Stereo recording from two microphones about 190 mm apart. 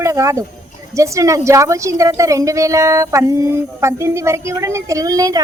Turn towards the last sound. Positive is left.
turn(degrees=-20)  # may be behind; listen again after turning